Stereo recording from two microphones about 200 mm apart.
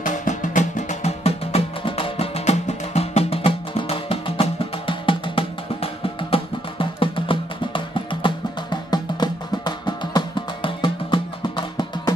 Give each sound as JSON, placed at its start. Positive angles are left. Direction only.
{"t": 0.0, "sound": "music", "side_deg": 40}